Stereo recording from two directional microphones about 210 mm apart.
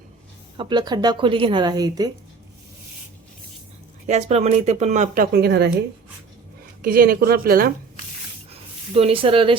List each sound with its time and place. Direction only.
0.5 s a woman's voice: 20° right (ahead or behind)
4.0 s speech: 35° right (ahead or behind); by 5.7 s 50° right (ahead or behind)
6.8 s a woman's voice: 45° right (ahead or behind)
9.0 s a woman's voice: 25° right (ahead or behind)